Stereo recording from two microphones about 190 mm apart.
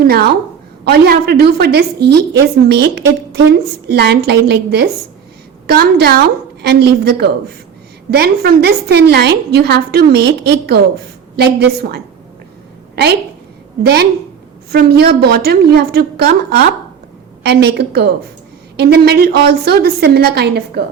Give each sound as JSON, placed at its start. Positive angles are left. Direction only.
{"t": 0.0, "sound": "a woman's voice", "side_deg": -55}
{"t": 13.8, "sound": "a woman's voice", "side_deg": -60}
{"t": 17.4, "sound": "a woman's voice", "side_deg": -60}